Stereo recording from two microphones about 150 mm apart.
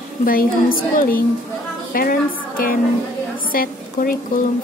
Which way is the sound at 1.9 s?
70° left (ahead or behind).